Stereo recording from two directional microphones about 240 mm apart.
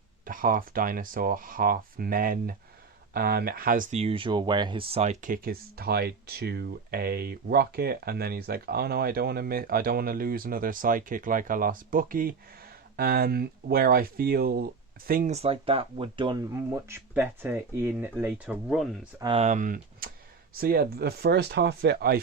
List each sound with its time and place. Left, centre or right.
0.3 s speech: right; by 18.9 s centre
19.2 s speech: right